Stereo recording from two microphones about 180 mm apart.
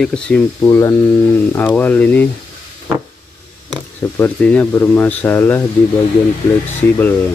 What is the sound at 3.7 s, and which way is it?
Speech, 10° left (ahead or behind).